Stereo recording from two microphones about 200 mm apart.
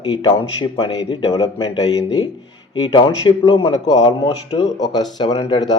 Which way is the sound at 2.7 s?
25° left (ahead or behind).